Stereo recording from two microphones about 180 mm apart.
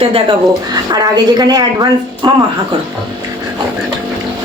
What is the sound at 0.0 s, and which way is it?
A woman's voice, 30° right (ahead or behind).